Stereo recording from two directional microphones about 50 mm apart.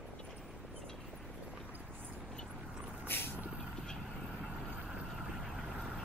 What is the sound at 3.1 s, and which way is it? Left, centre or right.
Vehicle, left.